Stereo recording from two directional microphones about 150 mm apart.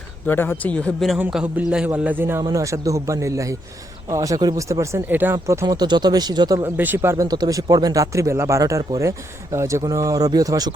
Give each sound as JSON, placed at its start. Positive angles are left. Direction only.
{"t": 0.3, "sound": "a man's voice", "side_deg": 15}
{"t": 6.7, "sound": "speech", "side_deg": -15}